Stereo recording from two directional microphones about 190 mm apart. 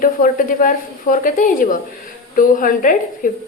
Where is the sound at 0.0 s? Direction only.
45° left (ahead or behind).